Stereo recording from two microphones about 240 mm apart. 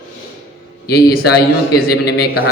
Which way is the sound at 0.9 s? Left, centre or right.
Left.